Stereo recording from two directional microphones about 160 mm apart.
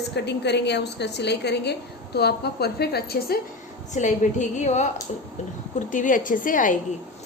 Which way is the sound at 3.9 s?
50° left (ahead or behind).